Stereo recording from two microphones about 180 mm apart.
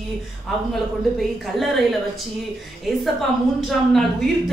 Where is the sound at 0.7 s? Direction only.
Centre (ahead or behind).